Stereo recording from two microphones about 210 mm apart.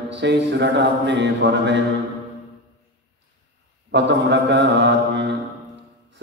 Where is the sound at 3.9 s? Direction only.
55° right (ahead or behind).